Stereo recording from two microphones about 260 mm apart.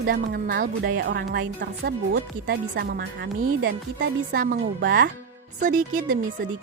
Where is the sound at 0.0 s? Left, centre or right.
Right.